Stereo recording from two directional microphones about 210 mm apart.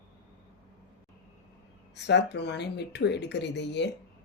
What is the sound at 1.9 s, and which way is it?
Speech, 55° left (ahead or behind).